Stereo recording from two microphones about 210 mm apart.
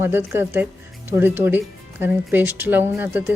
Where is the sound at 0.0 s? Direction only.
10° right (ahead or behind).